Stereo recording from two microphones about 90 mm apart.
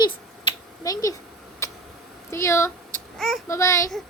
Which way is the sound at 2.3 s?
30° left (ahead or behind).